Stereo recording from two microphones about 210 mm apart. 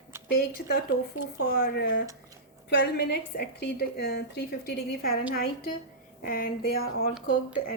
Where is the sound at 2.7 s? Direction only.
55° left (ahead or behind).